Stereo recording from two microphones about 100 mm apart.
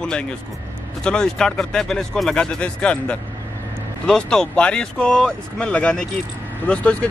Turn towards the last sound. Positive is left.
turn(degrees=10)  # may be behind; listen again after turning